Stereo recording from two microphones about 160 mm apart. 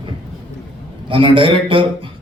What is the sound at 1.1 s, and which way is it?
Speech, 30° right (ahead or behind).